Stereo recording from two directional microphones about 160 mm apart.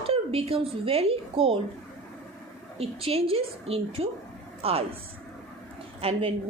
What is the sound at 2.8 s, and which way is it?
A woman's voice, 35° right (ahead or behind).